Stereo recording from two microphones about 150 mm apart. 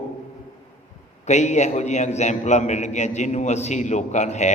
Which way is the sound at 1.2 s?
50° left (ahead or behind).